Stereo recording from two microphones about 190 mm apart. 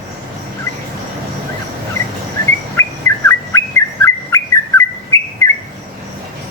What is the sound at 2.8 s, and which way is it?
Bird, 15° left (ahead or behind).